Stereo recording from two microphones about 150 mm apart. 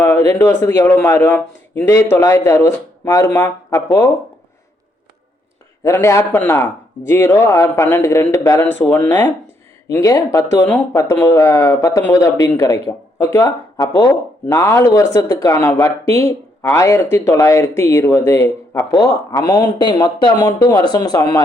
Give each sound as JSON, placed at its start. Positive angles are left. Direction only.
{"t": 0.0, "sound": "a man's voice", "side_deg": 20}
{"t": 5.8, "sound": "a man's voice", "side_deg": 20}